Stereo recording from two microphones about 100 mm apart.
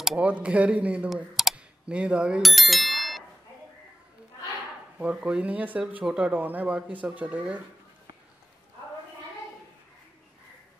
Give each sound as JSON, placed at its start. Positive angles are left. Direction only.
{"t": 0.2, "sound": "speech", "side_deg": -15}
{"t": 2.4, "sound": "bicycle bell", "side_deg": 0}
{"t": 4.9, "sound": "speech", "side_deg": -15}